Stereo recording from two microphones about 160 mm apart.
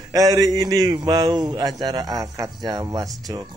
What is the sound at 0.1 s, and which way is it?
A man's voice, 25° right (ahead or behind).